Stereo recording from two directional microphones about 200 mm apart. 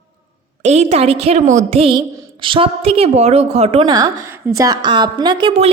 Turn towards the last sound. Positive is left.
turn(degrees=-30)  # may be behind; listen again after turning